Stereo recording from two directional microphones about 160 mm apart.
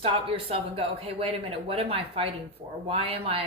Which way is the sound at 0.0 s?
35° right (ahead or behind).